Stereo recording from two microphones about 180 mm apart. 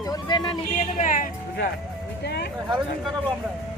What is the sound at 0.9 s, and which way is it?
Speech, 45° left (ahead or behind).